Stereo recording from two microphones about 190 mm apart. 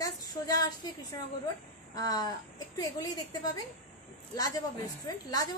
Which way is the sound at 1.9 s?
20° left (ahead or behind).